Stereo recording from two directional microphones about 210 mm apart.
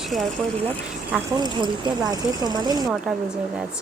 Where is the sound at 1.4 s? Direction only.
20° right (ahead or behind).